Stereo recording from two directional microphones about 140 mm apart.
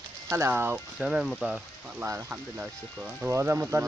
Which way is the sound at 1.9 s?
20° right (ahead or behind).